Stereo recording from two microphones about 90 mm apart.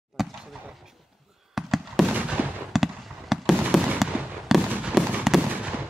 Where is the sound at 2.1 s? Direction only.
15° right (ahead or behind).